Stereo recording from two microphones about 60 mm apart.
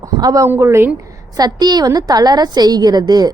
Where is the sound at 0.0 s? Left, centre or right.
Right.